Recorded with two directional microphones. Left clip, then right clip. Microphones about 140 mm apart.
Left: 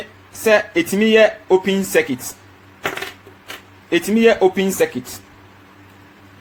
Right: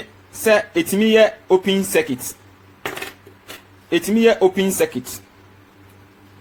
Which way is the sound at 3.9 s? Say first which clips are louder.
Left 1 dB; 15° right (ahead or behind).